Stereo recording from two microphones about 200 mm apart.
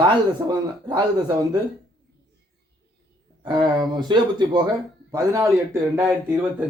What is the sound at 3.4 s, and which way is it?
Speech, 20° right (ahead or behind).